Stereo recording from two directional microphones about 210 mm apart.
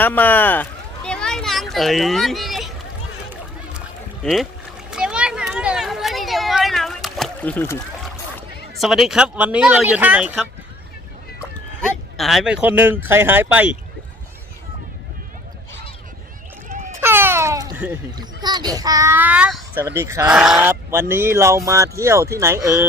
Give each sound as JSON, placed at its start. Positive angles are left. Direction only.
{"t": 0.0, "sound": "speech", "side_deg": 10}
{"t": 3.8, "sound": "a sound", "side_deg": 0}
{"t": 8.8, "sound": "speech", "side_deg": 0}
{"t": 12.1, "sound": "speech", "side_deg": 0}
{"t": 16.6, "sound": "a sound", "side_deg": -35}
{"t": 17.0, "sound": "music", "side_deg": -10}
{"t": 18.2, "sound": "speech", "side_deg": -20}